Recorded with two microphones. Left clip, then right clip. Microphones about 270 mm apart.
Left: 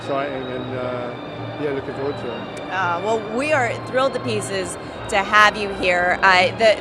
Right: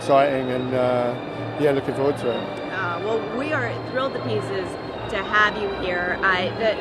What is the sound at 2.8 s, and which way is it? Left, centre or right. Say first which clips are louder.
Speech: left 4 dB; left.